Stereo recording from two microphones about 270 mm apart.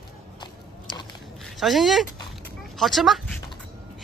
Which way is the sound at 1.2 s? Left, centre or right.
Centre.